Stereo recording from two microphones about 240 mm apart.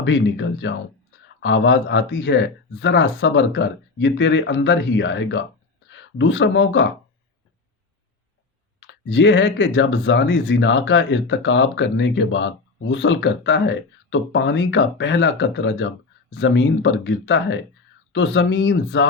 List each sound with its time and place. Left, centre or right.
0.0 s speech: left
8.9 s speech: left